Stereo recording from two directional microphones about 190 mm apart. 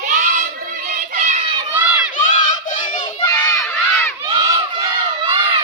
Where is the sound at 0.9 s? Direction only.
45° right (ahead or behind).